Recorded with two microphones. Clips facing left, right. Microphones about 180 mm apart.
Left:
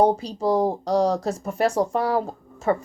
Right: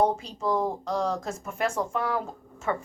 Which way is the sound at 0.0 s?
35° left (ahead or behind).